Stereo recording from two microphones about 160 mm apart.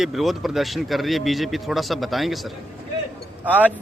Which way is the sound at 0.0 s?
Centre (ahead or behind).